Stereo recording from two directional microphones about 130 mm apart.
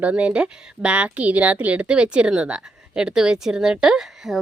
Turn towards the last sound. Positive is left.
turn(degrees=0)  # may be behind; listen again after turning